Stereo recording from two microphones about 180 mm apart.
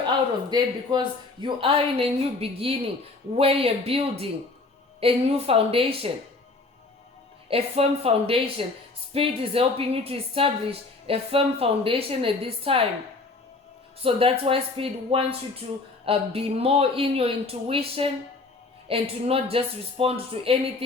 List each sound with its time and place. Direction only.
0.5 s a woman's voice: 25° right (ahead or behind)
7.4 s a woman's voice: 30° right (ahead or behind)
14.0 s a woman's voice: 30° right (ahead or behind)